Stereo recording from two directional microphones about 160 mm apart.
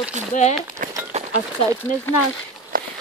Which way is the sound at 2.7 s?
65° right (ahead or behind).